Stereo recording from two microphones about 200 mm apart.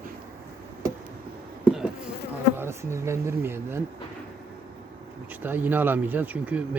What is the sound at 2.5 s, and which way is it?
Speech, 15° right (ahead or behind).